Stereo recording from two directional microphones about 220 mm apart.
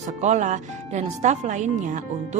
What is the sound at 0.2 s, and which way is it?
Speech, 35° right (ahead or behind).